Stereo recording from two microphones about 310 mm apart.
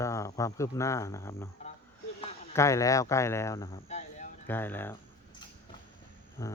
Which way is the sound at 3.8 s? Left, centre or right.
Left.